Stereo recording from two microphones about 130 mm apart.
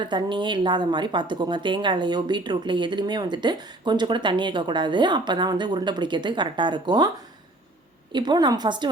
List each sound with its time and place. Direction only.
0.0 s speech: 35° right (ahead or behind)
8.1 s speech: 35° right (ahead or behind)